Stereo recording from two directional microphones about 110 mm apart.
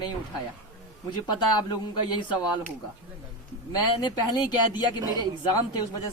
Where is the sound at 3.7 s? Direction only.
40° left (ahead or behind).